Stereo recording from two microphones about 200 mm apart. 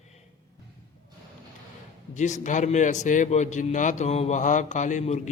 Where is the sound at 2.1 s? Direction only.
35° left (ahead or behind).